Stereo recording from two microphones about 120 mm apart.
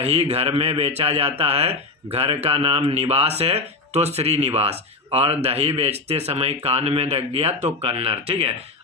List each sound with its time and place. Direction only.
0.0 s a man's voice: 65° right (ahead or behind)